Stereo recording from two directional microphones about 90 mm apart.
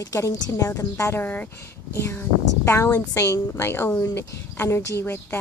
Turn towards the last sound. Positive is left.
turn(degrees=25)  # may be behind; listen again after turning